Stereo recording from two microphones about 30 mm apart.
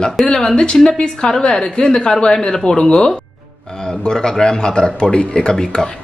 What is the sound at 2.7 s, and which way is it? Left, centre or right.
Speech, left.